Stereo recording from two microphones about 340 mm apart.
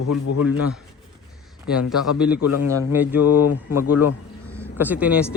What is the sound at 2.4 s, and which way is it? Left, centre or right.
Speech, left.